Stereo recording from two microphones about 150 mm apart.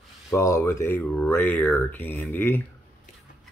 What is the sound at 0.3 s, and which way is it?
Speech, 20° left (ahead or behind).